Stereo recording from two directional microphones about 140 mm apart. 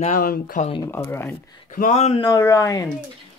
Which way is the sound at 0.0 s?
75° left (ahead or behind).